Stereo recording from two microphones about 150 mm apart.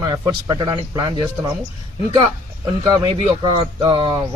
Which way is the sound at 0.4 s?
25° right (ahead or behind).